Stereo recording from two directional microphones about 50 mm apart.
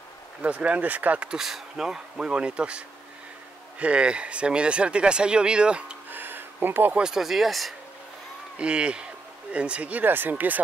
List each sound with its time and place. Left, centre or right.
0.4 s speech: right
1.3 s speech: centre
3.8 s speech: right
6.0 s a sound: right
7.0 s speech: centre
8.5 s speech: right